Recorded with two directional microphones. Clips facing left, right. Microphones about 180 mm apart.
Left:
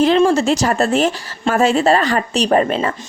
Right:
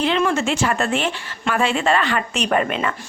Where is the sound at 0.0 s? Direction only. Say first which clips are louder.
Left 7 dB; 35° left (ahead or behind).